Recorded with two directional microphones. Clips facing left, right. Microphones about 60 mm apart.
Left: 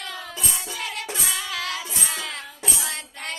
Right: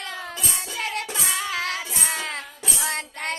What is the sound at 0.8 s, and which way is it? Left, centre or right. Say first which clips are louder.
Music: right 3 dB; right.